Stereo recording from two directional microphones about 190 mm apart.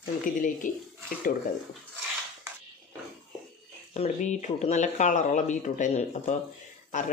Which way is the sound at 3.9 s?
35° left (ahead or behind).